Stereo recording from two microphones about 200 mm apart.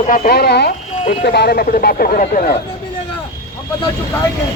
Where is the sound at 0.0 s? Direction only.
45° left (ahead or behind).